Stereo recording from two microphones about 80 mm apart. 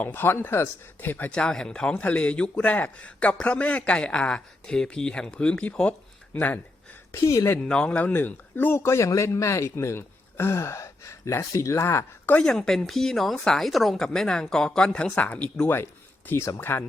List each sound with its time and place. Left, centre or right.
0.0 s speech: left
1.3 s speech: centre
7.1 s a man's voice: left
7.6 s a man's voice: centre; by 12.0 s left
12.4 s a woman's voice: centre; by 16.8 s left